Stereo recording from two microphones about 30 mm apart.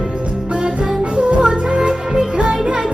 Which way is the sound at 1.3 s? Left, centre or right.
Right.